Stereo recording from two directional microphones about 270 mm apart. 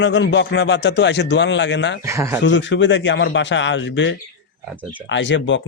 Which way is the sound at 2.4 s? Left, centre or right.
Left.